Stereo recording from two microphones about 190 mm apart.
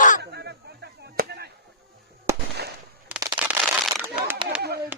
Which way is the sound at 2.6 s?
60° right (ahead or behind).